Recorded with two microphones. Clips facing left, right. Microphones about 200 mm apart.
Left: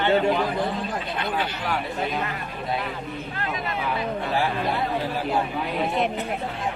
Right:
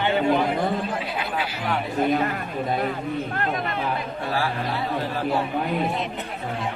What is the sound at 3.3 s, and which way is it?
Speech, 50° right (ahead or behind).